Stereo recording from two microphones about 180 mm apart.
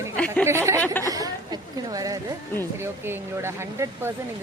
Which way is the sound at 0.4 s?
15° right (ahead or behind).